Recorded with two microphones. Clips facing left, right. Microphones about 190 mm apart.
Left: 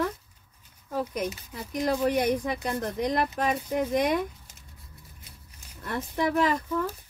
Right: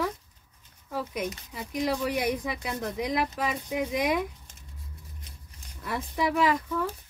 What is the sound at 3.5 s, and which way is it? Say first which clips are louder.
Speech: left 3 dB; 45° left (ahead or behind).